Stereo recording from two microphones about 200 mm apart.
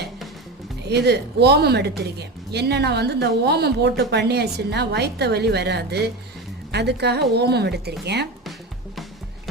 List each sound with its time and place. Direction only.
0.9 s a woman's voice: 55° right (ahead or behind)